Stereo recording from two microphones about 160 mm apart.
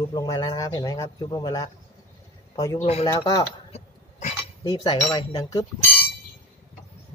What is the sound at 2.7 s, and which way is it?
Speech, 40° left (ahead or behind).